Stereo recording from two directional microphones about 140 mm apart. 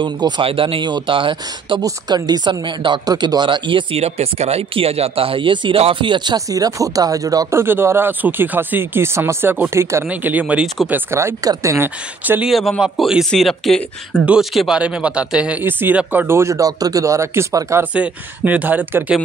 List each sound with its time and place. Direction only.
0.0 s speech: 35° right (ahead or behind); by 11.0 s 5° right (ahead or behind)
11.1 s speech: 20° right (ahead or behind)
12.4 s a man's voice: centre (ahead or behind); by 17.8 s 20° right (ahead or behind)
17.9 s speech: 10° right (ahead or behind)